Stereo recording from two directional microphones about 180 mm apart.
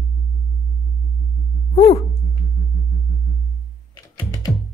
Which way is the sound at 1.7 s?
30° left (ahead or behind).